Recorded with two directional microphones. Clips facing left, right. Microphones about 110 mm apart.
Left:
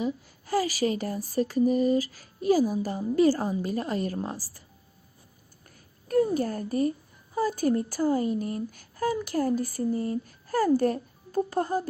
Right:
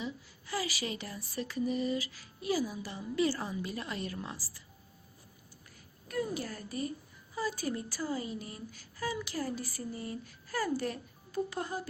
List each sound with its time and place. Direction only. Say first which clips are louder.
0.0 s speech: left 10 dB; 45° left (ahead or behind)
6.1 s a child's voice: left 11 dB; 45° left (ahead or behind)